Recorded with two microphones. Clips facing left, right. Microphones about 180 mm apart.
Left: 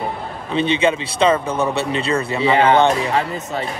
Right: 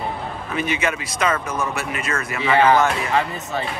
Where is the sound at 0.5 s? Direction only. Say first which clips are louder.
Left 7 dB; 30° left (ahead or behind).